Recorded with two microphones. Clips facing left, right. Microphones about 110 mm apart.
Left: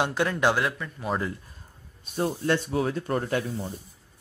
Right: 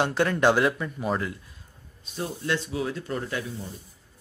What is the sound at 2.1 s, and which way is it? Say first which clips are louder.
Speech: left 4 dB; 45° left (ahead or behind).